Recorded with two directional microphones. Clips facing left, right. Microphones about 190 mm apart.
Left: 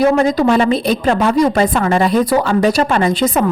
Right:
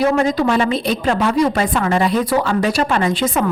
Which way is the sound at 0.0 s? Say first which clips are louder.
Left 3 dB; 40° left (ahead or behind).